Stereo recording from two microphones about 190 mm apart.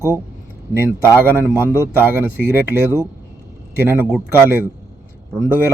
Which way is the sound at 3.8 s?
10° right (ahead or behind).